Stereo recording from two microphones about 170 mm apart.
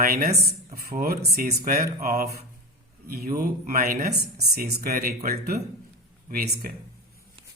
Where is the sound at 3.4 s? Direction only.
60° right (ahead or behind).